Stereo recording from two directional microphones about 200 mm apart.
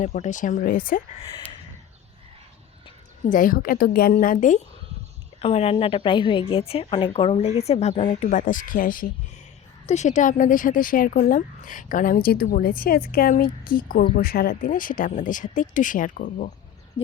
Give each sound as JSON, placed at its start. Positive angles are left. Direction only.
{"t": 0.0, "sound": "a woman's voice", "side_deg": 40}
{"t": 3.2, "sound": "a woman's voice", "side_deg": 45}